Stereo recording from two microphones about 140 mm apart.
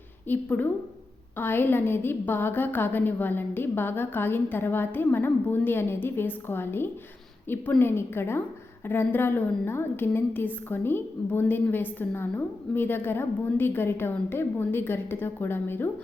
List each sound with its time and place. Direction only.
0.3 s a woman's voice: 10° left (ahead or behind)